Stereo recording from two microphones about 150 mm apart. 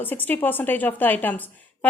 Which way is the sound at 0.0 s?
10° left (ahead or behind).